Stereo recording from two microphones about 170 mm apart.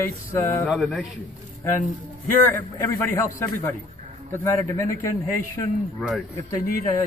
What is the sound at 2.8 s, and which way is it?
A man's voice, 15° left (ahead or behind).